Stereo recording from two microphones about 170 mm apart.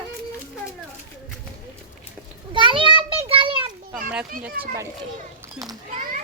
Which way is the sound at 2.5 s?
30° right (ahead or behind).